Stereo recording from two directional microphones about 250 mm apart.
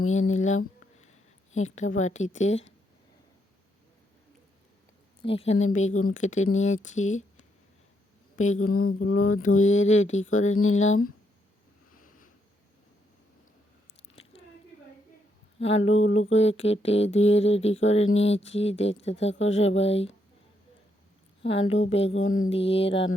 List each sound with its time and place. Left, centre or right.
0.1 s speech: left
5.2 s speech: left
8.4 s speech: left
8.7 s mantra: left
9.0 s mantra: left
9.4 s speech: left
14.2 s biting: left
15.5 s speech: left
21.4 s speech: left